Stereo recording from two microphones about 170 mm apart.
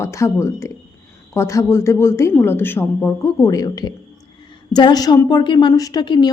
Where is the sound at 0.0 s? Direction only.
15° left (ahead or behind).